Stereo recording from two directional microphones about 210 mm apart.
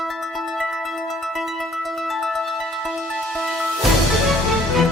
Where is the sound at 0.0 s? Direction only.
Centre (ahead or behind).